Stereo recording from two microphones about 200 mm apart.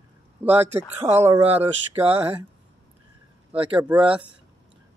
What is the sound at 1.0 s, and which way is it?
Speech, 15° right (ahead or behind).